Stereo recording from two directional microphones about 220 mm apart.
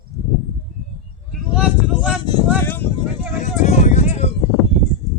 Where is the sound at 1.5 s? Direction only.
5° right (ahead or behind).